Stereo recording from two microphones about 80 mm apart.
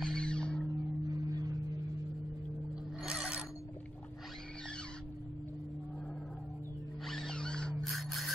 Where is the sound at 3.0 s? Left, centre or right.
Centre.